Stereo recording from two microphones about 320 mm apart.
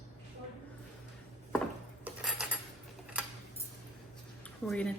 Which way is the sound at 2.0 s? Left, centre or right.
Centre.